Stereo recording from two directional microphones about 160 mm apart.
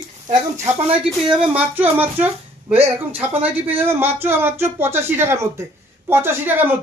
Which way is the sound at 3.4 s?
10° right (ahead or behind).